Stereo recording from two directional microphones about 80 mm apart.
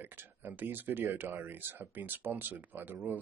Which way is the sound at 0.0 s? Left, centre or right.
Right.